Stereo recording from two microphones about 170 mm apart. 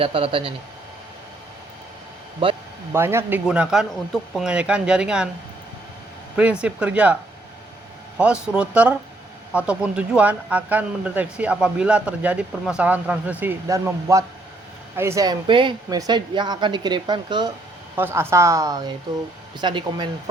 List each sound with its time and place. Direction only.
0.0 s speech: 30° right (ahead or behind)
2.9 s speech: 15° right (ahead or behind)
6.3 s speech: 5° right (ahead or behind)
8.2 s speech: 5° right (ahead or behind); by 17.5 s 25° right (ahead or behind)
17.9 s speech: 15° right (ahead or behind)